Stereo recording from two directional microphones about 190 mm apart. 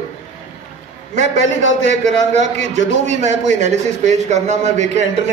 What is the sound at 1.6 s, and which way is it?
A man's voice, 40° right (ahead or behind).